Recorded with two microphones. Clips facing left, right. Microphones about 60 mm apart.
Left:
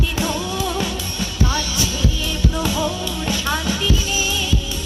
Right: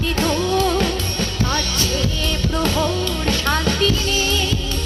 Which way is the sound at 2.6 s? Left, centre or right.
Right.